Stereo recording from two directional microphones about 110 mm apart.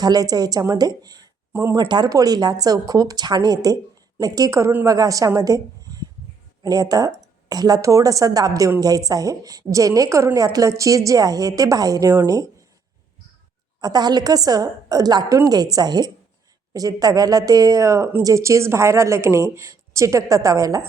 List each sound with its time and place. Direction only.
0.0 s a woman's voice: 35° right (ahead or behind)
13.8 s a woman's voice: 40° right (ahead or behind)